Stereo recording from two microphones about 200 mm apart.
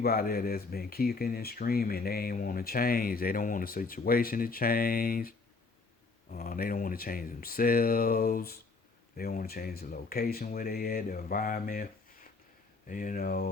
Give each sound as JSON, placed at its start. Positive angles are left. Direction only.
{"t": 0.0, "sound": "speech", "side_deg": 50}
{"t": 6.3, "sound": "speech", "side_deg": 45}
{"t": 12.9, "sound": "speech", "side_deg": 45}